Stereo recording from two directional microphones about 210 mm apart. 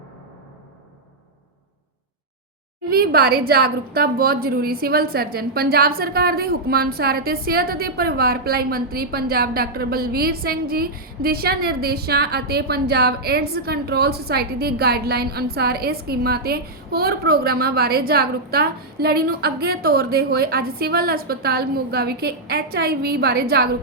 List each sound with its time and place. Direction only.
2.9 s a woman's voice: 45° right (ahead or behind)